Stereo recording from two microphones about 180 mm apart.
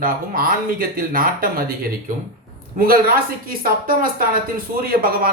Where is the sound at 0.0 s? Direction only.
55° right (ahead or behind).